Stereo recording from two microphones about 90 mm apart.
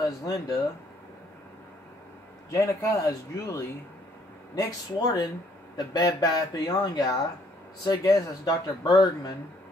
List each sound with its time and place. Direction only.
0.2 s speech: 40° left (ahead or behind)
2.5 s speech: 40° left (ahead or behind)